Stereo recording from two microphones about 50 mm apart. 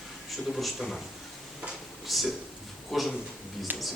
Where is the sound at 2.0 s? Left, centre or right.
Centre.